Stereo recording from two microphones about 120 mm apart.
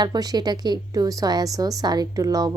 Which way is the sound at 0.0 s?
35° right (ahead or behind).